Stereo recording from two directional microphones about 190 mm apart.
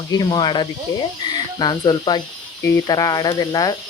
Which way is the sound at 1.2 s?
20° left (ahead or behind).